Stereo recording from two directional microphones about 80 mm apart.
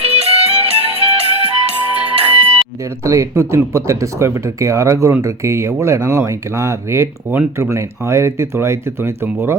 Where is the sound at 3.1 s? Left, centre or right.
Right.